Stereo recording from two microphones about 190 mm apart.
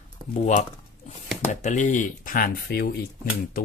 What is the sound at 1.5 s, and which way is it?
A man's voice, 40° left (ahead or behind).